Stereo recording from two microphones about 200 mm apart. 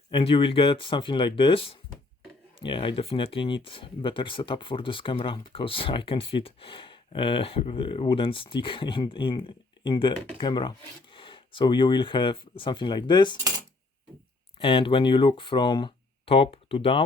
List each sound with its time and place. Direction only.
0.1 s speech: 25° left (ahead or behind)
14.6 s speech: 25° left (ahead or behind)